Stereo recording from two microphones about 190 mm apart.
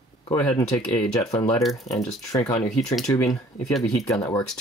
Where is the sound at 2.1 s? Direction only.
20° left (ahead or behind).